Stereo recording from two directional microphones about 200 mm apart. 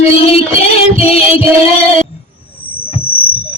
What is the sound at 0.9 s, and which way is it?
Music, 30° left (ahead or behind).